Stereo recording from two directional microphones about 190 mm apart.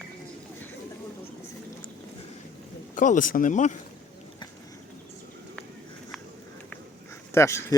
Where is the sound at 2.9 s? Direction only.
40° left (ahead or behind).